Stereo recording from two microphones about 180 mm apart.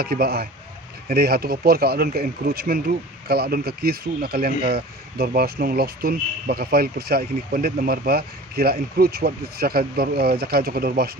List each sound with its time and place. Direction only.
0.0 s speech: 60° right (ahead or behind)